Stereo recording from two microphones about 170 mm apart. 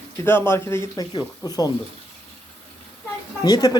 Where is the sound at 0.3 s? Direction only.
15° left (ahead or behind).